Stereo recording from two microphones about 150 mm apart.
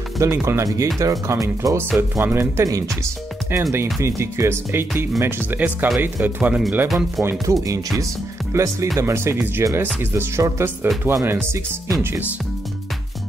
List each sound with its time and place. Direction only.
0.2 s speech: 20° right (ahead or behind); by 7.2 s centre (ahead or behind)
7.5 s speech: 20° right (ahead or behind)